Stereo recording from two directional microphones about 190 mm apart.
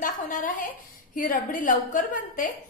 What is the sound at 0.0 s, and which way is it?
A woman's voice, 45° left (ahead or behind).